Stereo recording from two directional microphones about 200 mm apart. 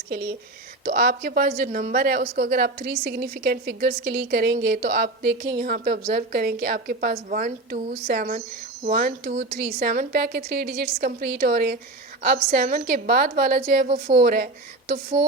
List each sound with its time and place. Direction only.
0.9 s speech: 50° right (ahead or behind)